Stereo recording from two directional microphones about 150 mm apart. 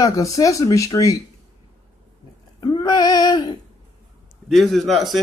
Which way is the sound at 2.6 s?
30° left (ahead or behind).